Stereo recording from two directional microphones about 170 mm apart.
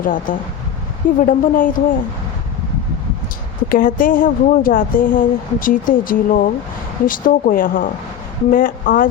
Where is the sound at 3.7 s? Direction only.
55° left (ahead or behind).